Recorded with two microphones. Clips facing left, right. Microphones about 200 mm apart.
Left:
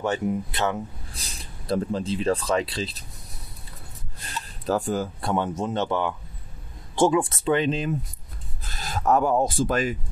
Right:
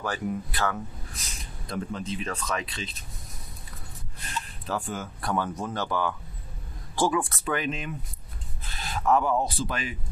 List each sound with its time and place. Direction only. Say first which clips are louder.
0.0 s speech: left 5 dB; 25° left (ahead or behind)
1.2 s speech: left 3 dB; 35° left (ahead or behind)
4.6 s speech: left 9 dB; 40° left (ahead or behind)
8.6 s speech: left 2 dB; 40° left (ahead or behind)